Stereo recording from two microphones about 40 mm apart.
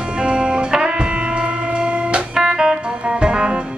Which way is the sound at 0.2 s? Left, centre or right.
Right.